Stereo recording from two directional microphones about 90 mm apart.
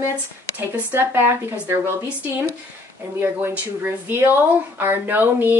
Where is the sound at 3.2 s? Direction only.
25° right (ahead or behind).